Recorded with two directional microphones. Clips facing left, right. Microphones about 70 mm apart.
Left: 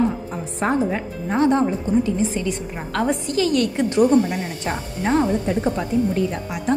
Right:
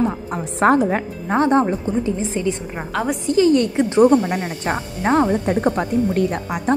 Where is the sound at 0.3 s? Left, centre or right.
Right.